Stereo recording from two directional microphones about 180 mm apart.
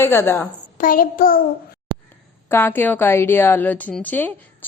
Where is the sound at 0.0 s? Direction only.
15° left (ahead or behind).